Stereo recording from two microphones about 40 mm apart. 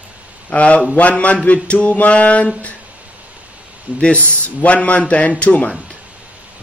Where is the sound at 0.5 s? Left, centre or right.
Left.